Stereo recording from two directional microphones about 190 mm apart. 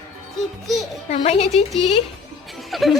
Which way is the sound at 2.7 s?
Centre (ahead or behind).